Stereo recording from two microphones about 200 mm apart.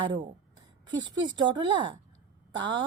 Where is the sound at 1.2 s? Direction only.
20° right (ahead or behind).